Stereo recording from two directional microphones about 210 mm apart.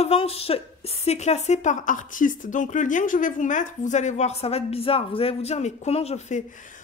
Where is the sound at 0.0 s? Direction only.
30° left (ahead or behind).